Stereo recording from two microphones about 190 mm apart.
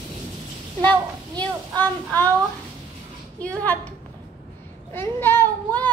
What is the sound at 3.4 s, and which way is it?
Speech, 5° left (ahead or behind).